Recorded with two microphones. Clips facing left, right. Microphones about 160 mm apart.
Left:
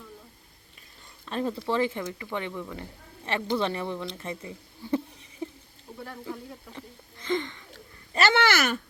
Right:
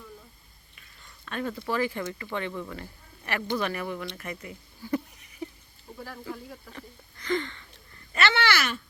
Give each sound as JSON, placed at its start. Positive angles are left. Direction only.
{"t": 1.2, "sound": "speech", "side_deg": 30}
{"t": 3.2, "sound": "speech", "side_deg": 25}
{"t": 6.7, "sound": "speech", "side_deg": 20}
{"t": 8.1, "sound": "a sound", "side_deg": 45}